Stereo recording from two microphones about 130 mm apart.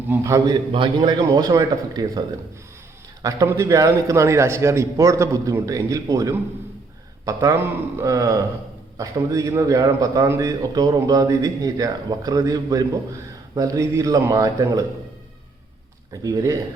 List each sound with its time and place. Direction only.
0.1 s a man's voice: 25° right (ahead or behind)
0.5 s a man's voice: 35° right (ahead or behind)
3.5 s a man's voice: 25° right (ahead or behind)
16.2 s a man's voice: 25° right (ahead or behind)